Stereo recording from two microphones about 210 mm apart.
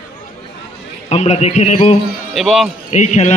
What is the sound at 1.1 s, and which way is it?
Speech, 30° left (ahead or behind).